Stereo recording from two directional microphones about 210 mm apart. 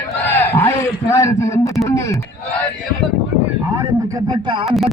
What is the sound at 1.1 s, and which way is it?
A man's voice, 15° left (ahead or behind).